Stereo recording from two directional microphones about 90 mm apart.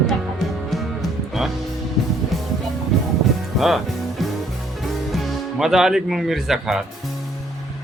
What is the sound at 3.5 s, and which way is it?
Music, centre (ahead or behind).